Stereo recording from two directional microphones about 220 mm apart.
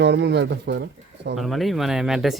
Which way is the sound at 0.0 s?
50° right (ahead or behind).